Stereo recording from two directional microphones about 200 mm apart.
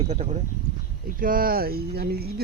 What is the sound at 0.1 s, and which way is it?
Speech, 35° right (ahead or behind).